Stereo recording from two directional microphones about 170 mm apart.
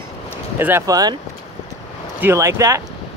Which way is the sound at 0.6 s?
15° right (ahead or behind).